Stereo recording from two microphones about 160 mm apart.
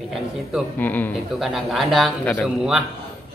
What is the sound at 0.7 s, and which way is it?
Speech, 10° left (ahead or behind).